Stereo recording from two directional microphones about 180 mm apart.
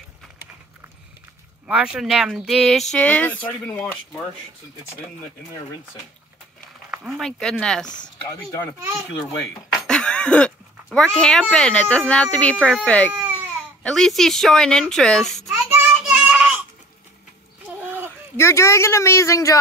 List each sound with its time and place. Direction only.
1.7 s speech: 5° right (ahead or behind)
6.9 s speech: centre (ahead or behind)
7.8 s speech: 25° left (ahead or behind)
8.7 s speech: 15° right (ahead or behind)
9.8 s a sound: 5° left (ahead or behind)
11.1 s speech: 5° left (ahead or behind)
13.1 s baby cry: 10° right (ahead or behind)
13.8 s a child's voice: centre (ahead or behind)
17.8 s a sound: 10° right (ahead or behind)
18.3 s speech: 15° left (ahead or behind)